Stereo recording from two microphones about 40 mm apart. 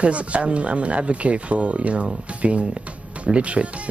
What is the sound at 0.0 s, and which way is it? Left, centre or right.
Speech, right.